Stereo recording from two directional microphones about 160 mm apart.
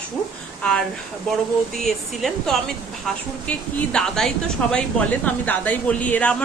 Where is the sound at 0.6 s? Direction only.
5° left (ahead or behind).